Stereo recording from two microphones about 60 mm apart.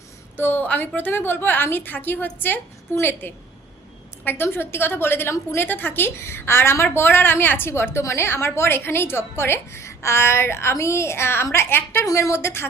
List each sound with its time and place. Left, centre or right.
0.3 s a woman's voice: left
6.8 s a woman's voice: left
12.0 s a woman's voice: left